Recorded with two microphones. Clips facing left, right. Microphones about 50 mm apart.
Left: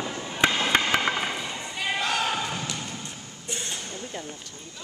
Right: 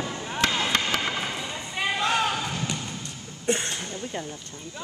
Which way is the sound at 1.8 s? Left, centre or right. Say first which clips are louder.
Right 2 dB; centre.